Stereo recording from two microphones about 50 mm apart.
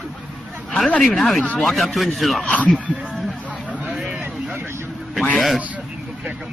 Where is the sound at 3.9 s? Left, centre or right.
Centre.